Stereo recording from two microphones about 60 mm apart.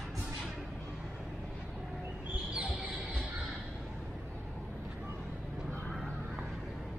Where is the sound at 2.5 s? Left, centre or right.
Centre.